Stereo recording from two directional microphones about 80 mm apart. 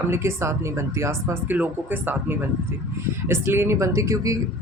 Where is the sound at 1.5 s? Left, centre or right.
Right.